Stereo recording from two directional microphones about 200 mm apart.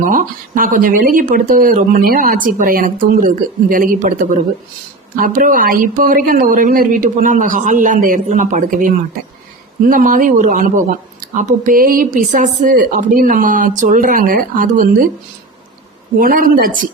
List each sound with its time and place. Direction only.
0.1 s speech: 40° right (ahead or behind)
5.1 s speech: 45° right (ahead or behind)
16.1 s speech: 45° right (ahead or behind)